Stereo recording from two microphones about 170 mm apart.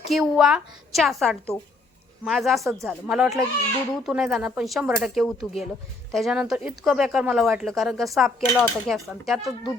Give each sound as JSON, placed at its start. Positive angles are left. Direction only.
{"t": 0.1, "sound": "speech", "side_deg": 0}